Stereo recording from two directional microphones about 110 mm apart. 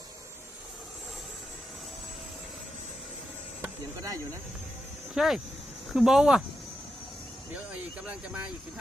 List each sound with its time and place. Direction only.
4.0 s speech: 30° right (ahead or behind)
5.1 s speech: 5° right (ahead or behind)
8.0 s speech: 10° right (ahead or behind)